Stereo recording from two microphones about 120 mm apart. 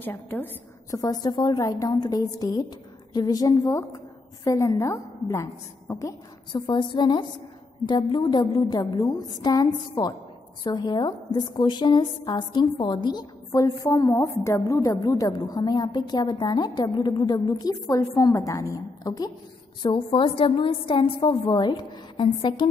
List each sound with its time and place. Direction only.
0.0 s a woman's voice: 15° left (ahead or behind)
0.8 s a woman's voice: 30° left (ahead or behind)
6.5 s a woman's voice: 40° left (ahead or behind)
19.8 s a woman's voice: 45° left (ahead or behind)